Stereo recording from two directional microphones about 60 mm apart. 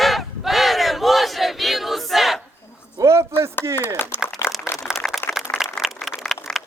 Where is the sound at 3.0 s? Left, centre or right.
Right.